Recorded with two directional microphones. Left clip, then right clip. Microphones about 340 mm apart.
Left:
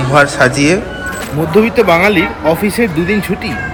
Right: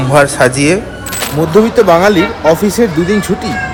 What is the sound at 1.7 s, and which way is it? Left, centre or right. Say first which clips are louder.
Speech: right 3 dB; centre.